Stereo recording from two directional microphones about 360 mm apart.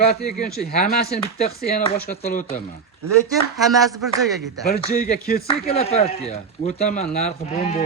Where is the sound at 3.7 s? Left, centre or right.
Centre.